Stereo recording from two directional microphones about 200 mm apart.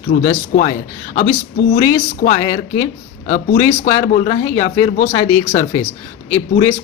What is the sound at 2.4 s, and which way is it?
A man's voice, 20° left (ahead or behind).